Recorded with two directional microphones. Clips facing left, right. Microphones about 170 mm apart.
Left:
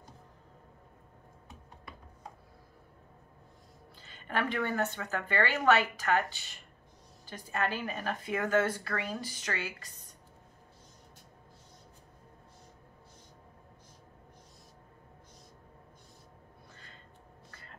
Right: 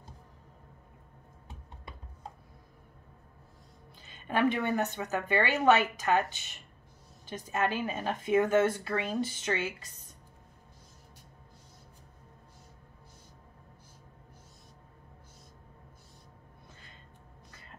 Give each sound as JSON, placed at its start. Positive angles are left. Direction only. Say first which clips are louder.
{"t": 4.0, "sound": "speech", "louder": "right 6 dB", "side_deg": -15}